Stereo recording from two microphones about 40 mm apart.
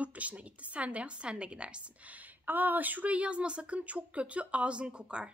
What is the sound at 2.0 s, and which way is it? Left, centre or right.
A woman's voice, right.